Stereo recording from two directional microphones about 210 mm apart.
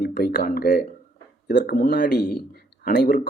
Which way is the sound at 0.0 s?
50° left (ahead or behind).